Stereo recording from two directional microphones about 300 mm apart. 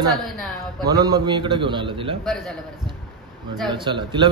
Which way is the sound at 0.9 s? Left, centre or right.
Centre.